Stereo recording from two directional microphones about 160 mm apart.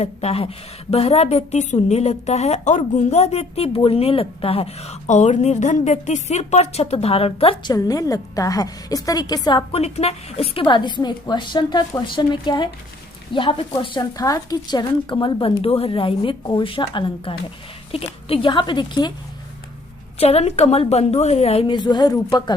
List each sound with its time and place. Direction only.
0.0 s a woman's voice: 40° left (ahead or behind); by 9.6 s 25° left (ahead or behind)
9.7 s a woman's voice: 40° left (ahead or behind)
20.1 s a woman's voice: 40° left (ahead or behind); by 22.5 s 25° left (ahead or behind)